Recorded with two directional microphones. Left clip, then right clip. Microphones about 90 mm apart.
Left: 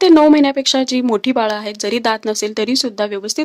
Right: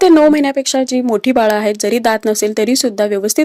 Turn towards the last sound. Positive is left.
turn(degrees=-25)  # may be behind; listen again after turning